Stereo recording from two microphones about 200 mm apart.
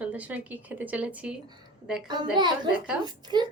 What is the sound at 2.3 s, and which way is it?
Speech, 20° right (ahead or behind).